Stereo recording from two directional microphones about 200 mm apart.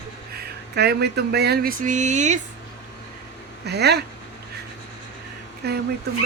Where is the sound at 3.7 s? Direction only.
55° right (ahead or behind).